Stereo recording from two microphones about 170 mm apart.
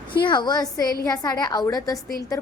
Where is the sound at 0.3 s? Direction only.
25° left (ahead or behind).